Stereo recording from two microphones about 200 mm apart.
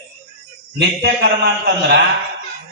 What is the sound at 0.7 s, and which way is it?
Speech, 55° right (ahead or behind).